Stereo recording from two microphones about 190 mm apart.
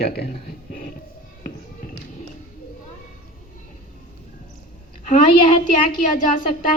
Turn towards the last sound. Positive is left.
turn(degrees=45)  # may be behind; listen again after turning